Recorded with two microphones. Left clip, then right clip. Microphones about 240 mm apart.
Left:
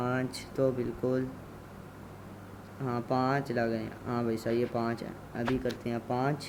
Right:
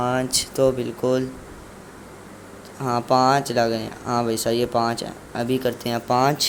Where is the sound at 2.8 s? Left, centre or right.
Centre.